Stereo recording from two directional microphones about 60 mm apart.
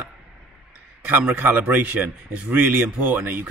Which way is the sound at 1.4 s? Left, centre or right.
Right.